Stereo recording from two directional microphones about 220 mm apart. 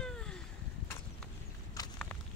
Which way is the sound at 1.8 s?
15° left (ahead or behind).